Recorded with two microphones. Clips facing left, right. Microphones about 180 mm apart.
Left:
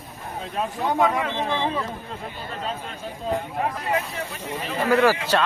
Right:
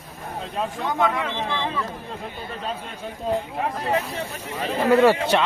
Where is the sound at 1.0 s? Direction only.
15° left (ahead or behind).